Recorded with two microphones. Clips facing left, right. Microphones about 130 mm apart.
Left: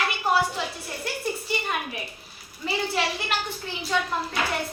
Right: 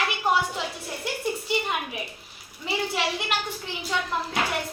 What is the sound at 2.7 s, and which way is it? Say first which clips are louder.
Speech: left 1 dB; 15° right (ahead or behind).